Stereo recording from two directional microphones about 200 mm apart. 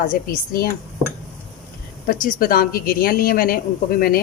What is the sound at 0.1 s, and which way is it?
Speech, 45° left (ahead or behind).